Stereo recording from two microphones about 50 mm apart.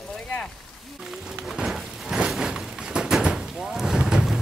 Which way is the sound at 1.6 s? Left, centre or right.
Centre.